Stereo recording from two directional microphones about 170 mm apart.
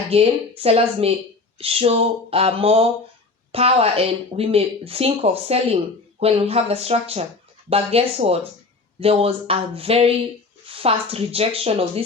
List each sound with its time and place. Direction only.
0.1 s speech: 35° right (ahead or behind)